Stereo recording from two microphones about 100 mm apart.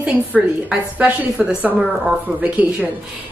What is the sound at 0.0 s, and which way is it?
A woman's voice, 15° right (ahead or behind).